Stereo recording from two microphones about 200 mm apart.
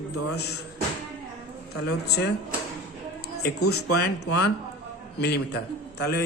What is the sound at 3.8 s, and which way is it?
A man's voice, 55° left (ahead or behind).